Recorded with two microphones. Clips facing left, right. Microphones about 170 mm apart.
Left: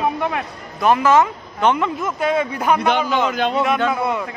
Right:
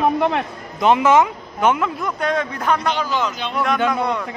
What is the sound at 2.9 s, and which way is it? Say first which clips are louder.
Speech: left 3 dB; 60° left (ahead or behind).